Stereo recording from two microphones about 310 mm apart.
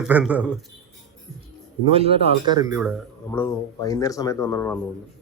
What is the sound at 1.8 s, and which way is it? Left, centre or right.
Speech, centre.